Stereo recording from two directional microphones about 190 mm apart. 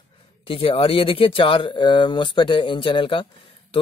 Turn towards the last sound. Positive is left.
turn(degrees=25)  # may be behind; listen again after turning